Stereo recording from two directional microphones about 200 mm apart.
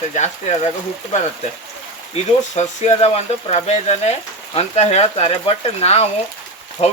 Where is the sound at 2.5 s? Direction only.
35° left (ahead or behind).